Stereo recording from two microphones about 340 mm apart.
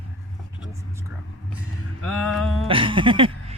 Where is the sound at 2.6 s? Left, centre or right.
Centre.